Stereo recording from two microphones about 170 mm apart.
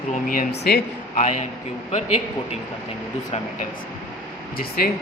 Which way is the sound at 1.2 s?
45° left (ahead or behind).